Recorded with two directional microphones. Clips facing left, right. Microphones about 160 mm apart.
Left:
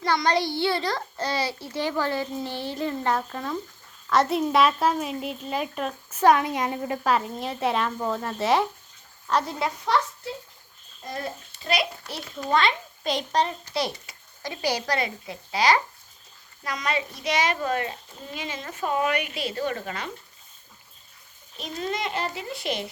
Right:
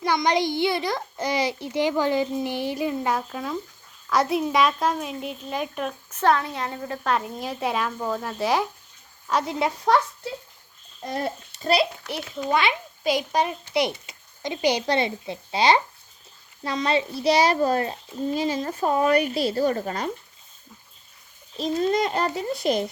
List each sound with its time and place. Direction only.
0.0 s a child's voice: 15° right (ahead or behind)
9.9 s speech: 50° right (ahead or behind)
11.6 s a woman's voice: 30° right (ahead or behind)
12.0 s a child's voice: 15° right (ahead or behind); by 20.1 s 40° right (ahead or behind)
21.6 s a woman's voice: 35° right (ahead or behind)